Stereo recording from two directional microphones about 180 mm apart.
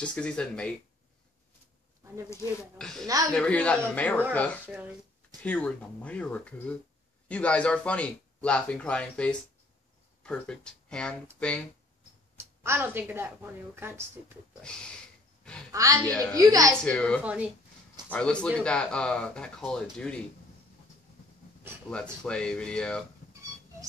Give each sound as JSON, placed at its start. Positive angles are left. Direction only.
{"t": 0.0, "sound": "speech", "side_deg": 5}
{"t": 2.8, "sound": "speech", "side_deg": 5}
{"t": 5.4, "sound": "speech", "side_deg": 10}
{"t": 12.4, "sound": "a woman's voice", "side_deg": -10}
{"t": 15.7, "sound": "a woman's voice", "side_deg": -20}
{"t": 16.1, "sound": "speech", "side_deg": 5}
{"t": 16.3, "sound": "speech", "side_deg": -20}
{"t": 16.8, "sound": "speech", "side_deg": 5}
{"t": 17.2, "sound": "a woman's voice", "side_deg": -5}
{"t": 18.0, "sound": "speech", "side_deg": 5}
{"t": 21.9, "sound": "speech", "side_deg": 5}